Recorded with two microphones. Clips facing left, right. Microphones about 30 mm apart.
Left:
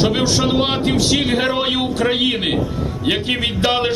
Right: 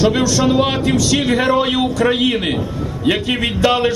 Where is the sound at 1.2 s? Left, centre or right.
Left.